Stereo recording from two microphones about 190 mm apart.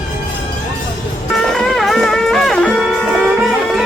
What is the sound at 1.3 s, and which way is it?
Music, centre (ahead or behind).